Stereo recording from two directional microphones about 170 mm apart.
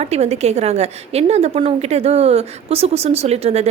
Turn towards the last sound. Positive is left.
turn(degrees=-40)  # may be behind; listen again after turning